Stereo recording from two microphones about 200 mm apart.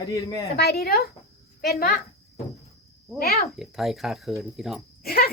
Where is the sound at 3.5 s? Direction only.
Centre (ahead or behind).